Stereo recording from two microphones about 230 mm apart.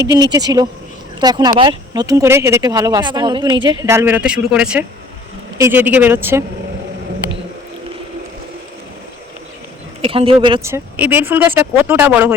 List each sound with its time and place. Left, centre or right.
0.1 s speech: centre
10.0 s speech: right; by 12.3 s centre